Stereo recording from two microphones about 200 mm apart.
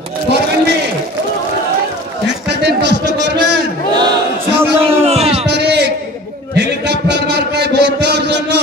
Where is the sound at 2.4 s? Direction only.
55° right (ahead or behind).